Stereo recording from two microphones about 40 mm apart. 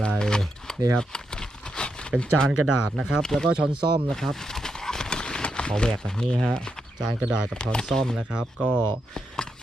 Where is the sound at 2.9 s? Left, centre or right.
Centre.